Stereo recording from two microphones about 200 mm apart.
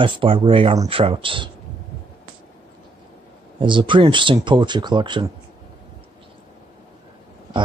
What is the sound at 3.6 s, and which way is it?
Speech, 25° right (ahead or behind).